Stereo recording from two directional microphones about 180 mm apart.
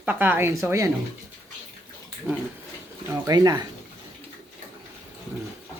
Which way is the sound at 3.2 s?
20° right (ahead or behind).